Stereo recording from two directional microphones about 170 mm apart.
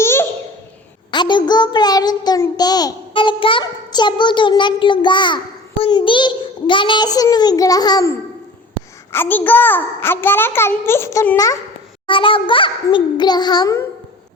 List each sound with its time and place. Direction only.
0.0 s babbling: 15° left (ahead or behind)
1.1 s child singing: 25° left (ahead or behind)
5.8 s a child's voice: 30° left (ahead or behind)
9.1 s a child's voice: 10° left (ahead or behind)
12.0 s a child's voice: 30° left (ahead or behind)